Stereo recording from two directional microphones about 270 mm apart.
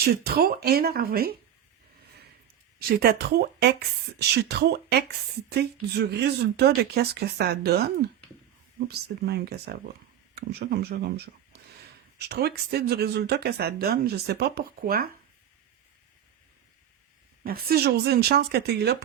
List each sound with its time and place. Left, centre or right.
0.0 s speech: right
2.7 s speech: right
12.3 s speech: right
17.4 s speech: right